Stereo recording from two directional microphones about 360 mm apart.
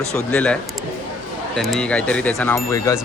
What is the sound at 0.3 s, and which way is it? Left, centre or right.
Speech, centre.